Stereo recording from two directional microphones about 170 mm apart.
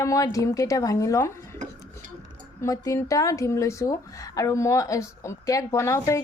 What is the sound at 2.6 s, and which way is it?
Speech, 20° left (ahead or behind).